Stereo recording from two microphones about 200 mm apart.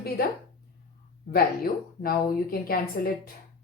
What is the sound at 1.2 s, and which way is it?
A woman's voice, 50° left (ahead or behind).